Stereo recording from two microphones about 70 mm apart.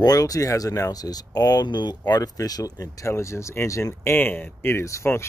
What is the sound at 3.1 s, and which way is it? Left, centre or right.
Speech, left.